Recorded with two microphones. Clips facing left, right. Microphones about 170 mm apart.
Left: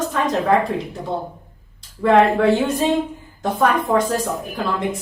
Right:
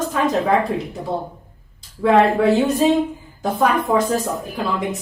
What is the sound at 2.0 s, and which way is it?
A woman's voice, centre (ahead or behind).